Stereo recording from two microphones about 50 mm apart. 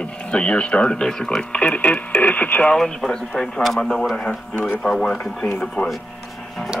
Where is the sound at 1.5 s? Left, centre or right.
Left.